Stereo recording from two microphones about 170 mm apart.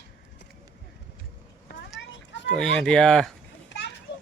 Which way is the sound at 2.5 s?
5° left (ahead or behind).